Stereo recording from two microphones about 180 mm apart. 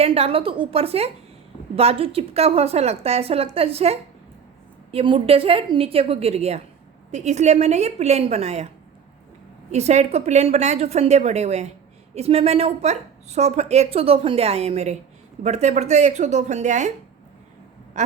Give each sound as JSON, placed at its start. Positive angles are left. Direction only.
{"t": 0.0, "sound": "speech", "side_deg": -35}
{"t": 9.7, "sound": "speech", "side_deg": -40}